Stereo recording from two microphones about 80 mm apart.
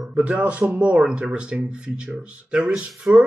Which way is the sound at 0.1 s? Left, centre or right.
Centre.